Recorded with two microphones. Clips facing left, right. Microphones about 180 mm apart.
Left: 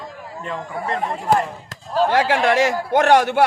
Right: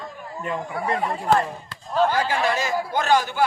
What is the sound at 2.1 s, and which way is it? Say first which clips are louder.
A man's voice: left 5 dB; 90° left.